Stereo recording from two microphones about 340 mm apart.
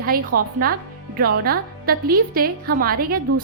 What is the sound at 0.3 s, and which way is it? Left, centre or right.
Speech, right.